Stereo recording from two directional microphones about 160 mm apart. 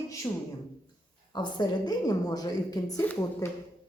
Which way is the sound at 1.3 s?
30° left (ahead or behind).